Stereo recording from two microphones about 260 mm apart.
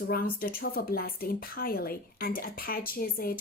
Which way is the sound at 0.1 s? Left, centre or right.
Left.